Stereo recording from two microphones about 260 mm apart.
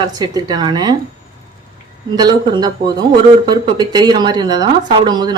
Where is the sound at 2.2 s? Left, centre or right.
Centre.